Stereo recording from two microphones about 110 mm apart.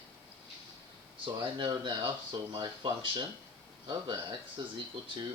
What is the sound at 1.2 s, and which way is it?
Speech, 45° right (ahead or behind).